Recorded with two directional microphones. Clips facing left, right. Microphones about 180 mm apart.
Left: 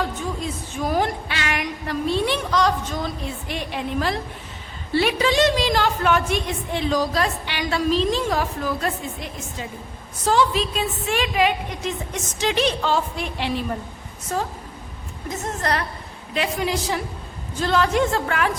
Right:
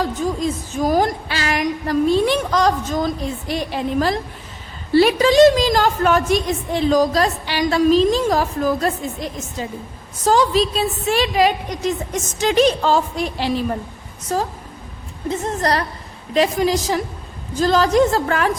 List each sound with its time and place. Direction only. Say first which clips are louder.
0.0 s a woman's voice: right 6 dB; 40° right (ahead or behind)